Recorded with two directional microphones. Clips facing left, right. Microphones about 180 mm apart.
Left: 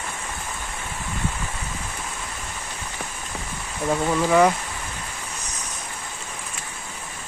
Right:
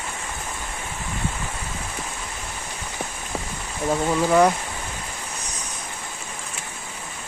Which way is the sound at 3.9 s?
Centre (ahead or behind).